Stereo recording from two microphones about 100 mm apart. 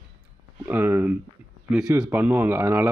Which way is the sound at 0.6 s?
20° right (ahead or behind).